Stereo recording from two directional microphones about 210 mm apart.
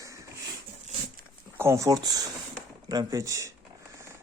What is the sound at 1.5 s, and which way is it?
Speech, 15° right (ahead or behind).